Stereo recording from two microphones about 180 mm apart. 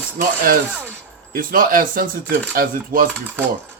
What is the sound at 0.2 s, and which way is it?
A man's voice, 55° right (ahead or behind).